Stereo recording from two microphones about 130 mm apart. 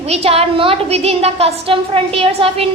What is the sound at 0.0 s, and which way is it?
A woman's voice, 50° right (ahead or behind).